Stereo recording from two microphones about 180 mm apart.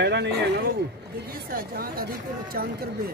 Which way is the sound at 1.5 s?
55° right (ahead or behind).